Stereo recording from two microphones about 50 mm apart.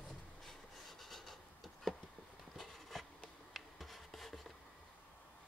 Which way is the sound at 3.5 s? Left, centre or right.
Centre.